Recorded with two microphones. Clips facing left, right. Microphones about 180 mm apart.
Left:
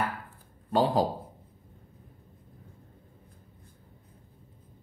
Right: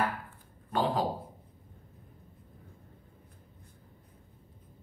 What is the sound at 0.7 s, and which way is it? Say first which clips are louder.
Speech: left 5 dB; 30° left (ahead or behind).